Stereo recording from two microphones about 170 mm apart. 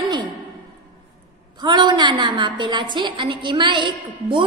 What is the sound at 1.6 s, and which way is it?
A woman's voice, 25° right (ahead or behind).